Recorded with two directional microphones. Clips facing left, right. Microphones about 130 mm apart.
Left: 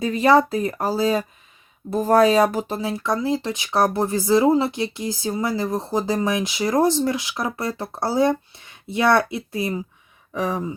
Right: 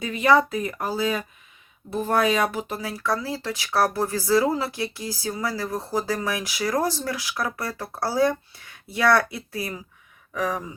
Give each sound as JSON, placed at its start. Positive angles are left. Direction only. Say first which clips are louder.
{"t": 0.0, "sound": "speech", "louder": "left 3 dB", "side_deg": 35}